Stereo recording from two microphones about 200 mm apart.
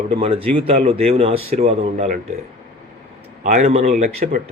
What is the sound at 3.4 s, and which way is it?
Speech, 35° right (ahead or behind).